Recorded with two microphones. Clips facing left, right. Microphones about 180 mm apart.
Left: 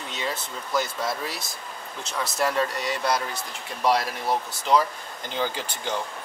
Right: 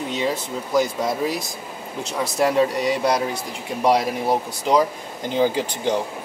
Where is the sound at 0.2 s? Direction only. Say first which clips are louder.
Right 4 dB; 10° right (ahead or behind).